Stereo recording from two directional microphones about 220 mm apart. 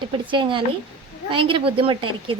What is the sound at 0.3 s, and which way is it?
Speech, 20° right (ahead or behind).